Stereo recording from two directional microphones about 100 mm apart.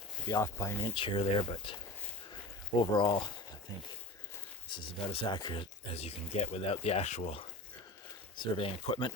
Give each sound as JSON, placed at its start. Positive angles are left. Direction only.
{"t": 0.3, "sound": "speech", "side_deg": 35}
{"t": 0.9, "sound": "speech", "side_deg": 60}
{"t": 2.8, "sound": "speech", "side_deg": 50}
{"t": 4.7, "sound": "speech", "side_deg": 60}
{"t": 5.9, "sound": "speech", "side_deg": 90}
{"t": 8.4, "sound": "speech", "side_deg": 60}